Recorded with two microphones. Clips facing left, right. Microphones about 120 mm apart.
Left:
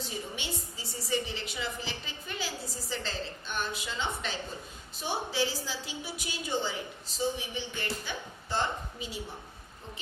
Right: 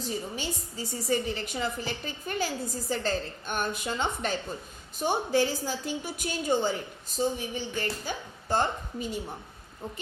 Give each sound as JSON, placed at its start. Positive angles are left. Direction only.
{"t": 0.0, "sound": "a woman's voice", "side_deg": -40}